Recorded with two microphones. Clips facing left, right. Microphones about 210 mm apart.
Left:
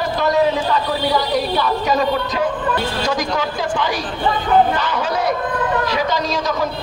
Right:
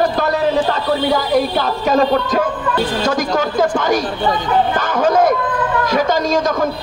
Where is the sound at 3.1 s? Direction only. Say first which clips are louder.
Right 3 dB; 50° right (ahead or behind).